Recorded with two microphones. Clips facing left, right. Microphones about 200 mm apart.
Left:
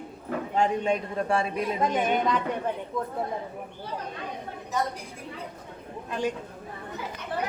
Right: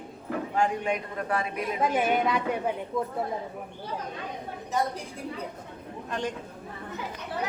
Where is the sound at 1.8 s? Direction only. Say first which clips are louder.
Right 1 dB; 5° right (ahead or behind).